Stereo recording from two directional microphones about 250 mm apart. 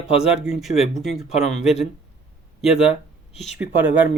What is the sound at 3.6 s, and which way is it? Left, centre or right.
Speech, centre.